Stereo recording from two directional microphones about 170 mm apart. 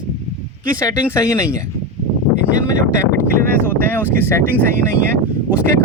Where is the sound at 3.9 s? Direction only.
10° left (ahead or behind).